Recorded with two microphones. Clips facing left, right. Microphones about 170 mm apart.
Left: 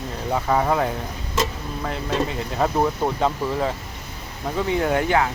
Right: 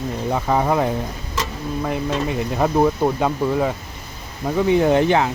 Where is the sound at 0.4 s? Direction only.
15° right (ahead or behind).